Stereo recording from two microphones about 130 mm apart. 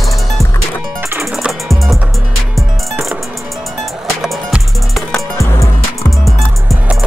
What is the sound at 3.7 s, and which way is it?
Music, centre (ahead or behind).